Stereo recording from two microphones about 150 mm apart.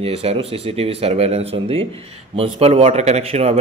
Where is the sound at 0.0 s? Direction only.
40° right (ahead or behind).